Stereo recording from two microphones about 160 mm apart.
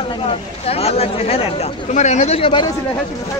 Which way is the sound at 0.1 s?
35° left (ahead or behind).